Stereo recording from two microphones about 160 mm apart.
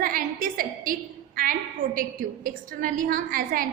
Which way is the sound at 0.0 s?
60° right (ahead or behind).